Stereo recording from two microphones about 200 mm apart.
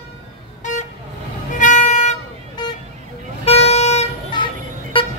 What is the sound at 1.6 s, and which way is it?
Music, 40° left (ahead or behind).